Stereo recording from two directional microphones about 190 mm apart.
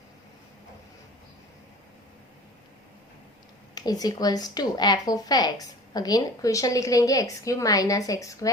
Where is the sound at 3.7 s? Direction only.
20° left (ahead or behind).